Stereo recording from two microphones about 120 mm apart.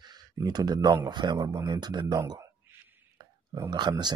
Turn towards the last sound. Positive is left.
turn(degrees=-35)  # may be behind; listen again after turning